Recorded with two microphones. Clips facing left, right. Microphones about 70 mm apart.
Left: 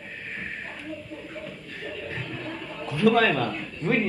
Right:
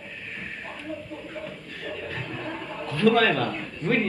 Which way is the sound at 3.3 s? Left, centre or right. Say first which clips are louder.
Right 1 dB; centre.